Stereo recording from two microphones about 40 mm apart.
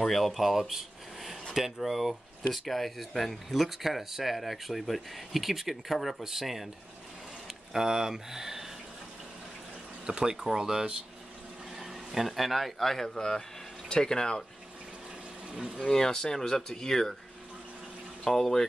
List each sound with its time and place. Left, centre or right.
0.0 s speech: centre
10.0 s speech: centre
15.5 s speech: centre
15.9 s speech: centre
18.2 s speech: centre